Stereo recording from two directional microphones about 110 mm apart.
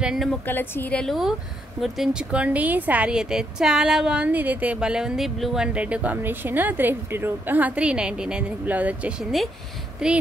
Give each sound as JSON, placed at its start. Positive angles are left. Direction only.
{"t": 0.0, "sound": "a woman's voice", "side_deg": 0}
{"t": 0.5, "sound": "speech", "side_deg": 15}
{"t": 1.0, "sound": "a woman's voice", "side_deg": 0}